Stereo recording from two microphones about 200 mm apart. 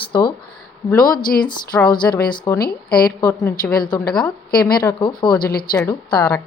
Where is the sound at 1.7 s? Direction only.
5° left (ahead or behind).